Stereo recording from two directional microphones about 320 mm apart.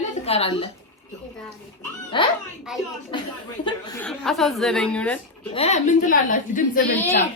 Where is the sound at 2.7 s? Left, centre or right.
Centre.